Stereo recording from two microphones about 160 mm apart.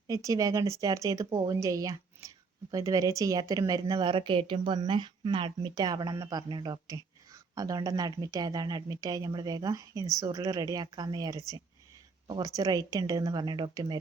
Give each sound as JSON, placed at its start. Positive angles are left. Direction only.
{"t": 0.1, "sound": "speech", "side_deg": -20}